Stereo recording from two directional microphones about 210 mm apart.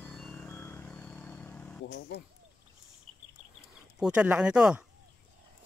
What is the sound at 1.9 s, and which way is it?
Speech, 55° left (ahead or behind).